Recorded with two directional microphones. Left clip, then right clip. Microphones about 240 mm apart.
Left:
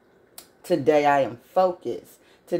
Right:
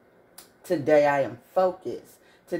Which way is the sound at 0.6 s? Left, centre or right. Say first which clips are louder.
Left 1 dB; left.